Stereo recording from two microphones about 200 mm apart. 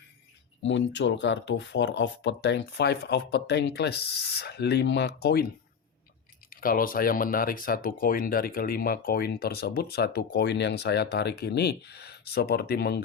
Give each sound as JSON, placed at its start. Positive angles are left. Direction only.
{"t": 0.6, "sound": "speech", "side_deg": 65}
{"t": 6.5, "sound": "speech", "side_deg": 45}